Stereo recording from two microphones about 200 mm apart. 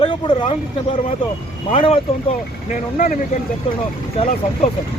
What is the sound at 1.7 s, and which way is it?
Speech, 30° left (ahead or behind).